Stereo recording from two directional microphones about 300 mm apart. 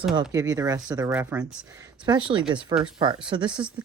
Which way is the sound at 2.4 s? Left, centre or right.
Centre.